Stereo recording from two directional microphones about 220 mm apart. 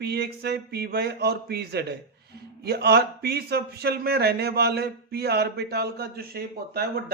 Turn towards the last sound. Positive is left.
turn(degrees=-45)  # may be behind; listen again after turning